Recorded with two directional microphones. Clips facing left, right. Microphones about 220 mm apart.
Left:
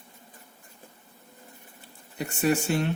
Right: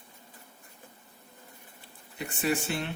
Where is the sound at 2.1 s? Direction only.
40° left (ahead or behind).